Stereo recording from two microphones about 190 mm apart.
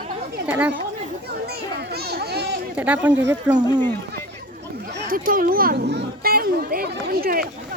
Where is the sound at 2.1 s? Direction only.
55° right (ahead or behind).